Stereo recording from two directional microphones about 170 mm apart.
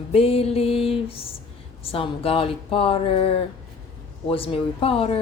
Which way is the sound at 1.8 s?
35° left (ahead or behind).